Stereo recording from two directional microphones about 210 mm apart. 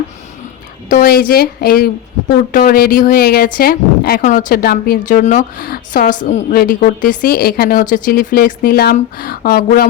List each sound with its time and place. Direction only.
0.9 s speech: 45° left (ahead or behind)